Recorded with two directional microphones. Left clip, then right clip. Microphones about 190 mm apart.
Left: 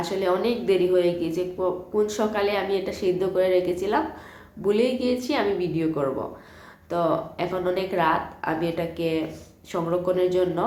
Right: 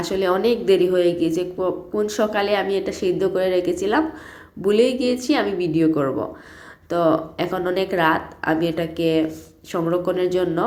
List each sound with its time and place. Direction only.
0.0 s a woman's voice: 30° right (ahead or behind)